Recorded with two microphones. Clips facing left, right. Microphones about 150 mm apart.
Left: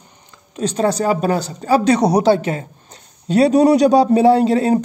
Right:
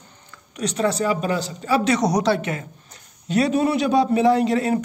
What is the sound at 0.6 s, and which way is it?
A woman's voice, 35° left (ahead or behind).